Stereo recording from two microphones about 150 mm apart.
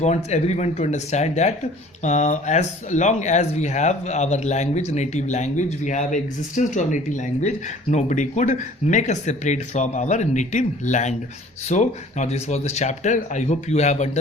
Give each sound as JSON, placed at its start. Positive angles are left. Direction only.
{"t": 0.0, "sound": "speech", "side_deg": 50}